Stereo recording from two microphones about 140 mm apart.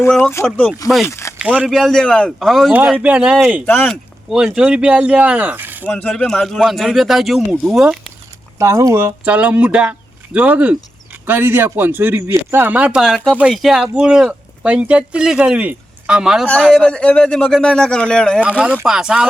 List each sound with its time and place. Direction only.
0.1 s speech: 15° left (ahead or behind)
1.4 s a man's voice: 5° right (ahead or behind)
3.7 s speech: 15° left (ahead or behind)
4.3 s speech: 5° right (ahead or behind)
5.9 s a man's voice: 10° left (ahead or behind)
8.5 s speech: 20° right (ahead or behind)
9.2 s a man's voice: 10° right (ahead or behind); by 18.6 s 10° left (ahead or behind)
18.6 s a man's voice: 10° right (ahead or behind)